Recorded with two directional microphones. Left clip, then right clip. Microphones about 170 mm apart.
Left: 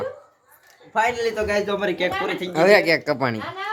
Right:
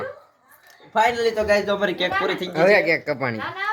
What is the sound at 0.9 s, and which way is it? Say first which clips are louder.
A man's voice: right 2 dB; 5° right (ahead or behind).